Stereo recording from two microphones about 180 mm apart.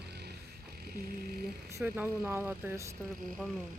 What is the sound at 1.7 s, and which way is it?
Speech, 15° right (ahead or behind).